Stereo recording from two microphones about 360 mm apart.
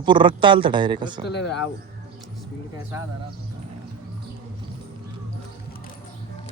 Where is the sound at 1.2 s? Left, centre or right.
Left.